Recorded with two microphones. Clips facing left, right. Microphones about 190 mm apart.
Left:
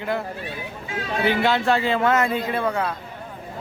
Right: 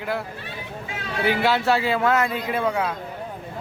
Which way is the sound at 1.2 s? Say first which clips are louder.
Even; 5° right (ahead or behind).